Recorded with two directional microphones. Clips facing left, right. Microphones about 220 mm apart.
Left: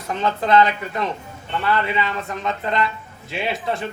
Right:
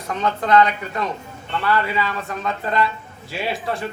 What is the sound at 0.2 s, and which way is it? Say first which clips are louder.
Speech: even; 25° left (ahead or behind).